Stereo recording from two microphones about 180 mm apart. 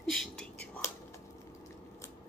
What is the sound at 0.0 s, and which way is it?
Whispering, 5° left (ahead or behind).